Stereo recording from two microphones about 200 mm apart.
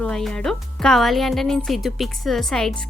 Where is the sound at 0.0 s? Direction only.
5° left (ahead or behind).